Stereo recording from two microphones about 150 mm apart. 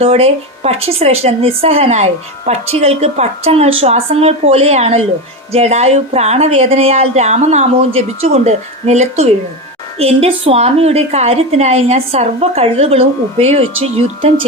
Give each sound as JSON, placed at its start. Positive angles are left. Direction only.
{"t": 0.0, "sound": "a woman's voice", "side_deg": -45}